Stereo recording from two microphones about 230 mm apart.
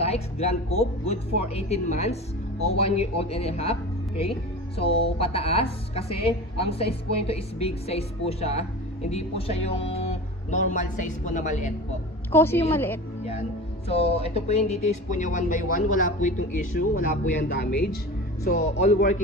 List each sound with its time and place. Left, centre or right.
0.0 s speech: left
12.3 s a woman's voice: centre
13.8 s speech: left